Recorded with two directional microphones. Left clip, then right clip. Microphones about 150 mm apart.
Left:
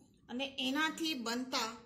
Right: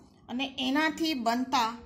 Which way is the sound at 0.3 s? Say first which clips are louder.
Right 7 dB; 50° right (ahead or behind).